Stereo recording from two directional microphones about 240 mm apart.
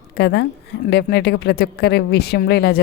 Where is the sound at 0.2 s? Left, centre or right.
Left.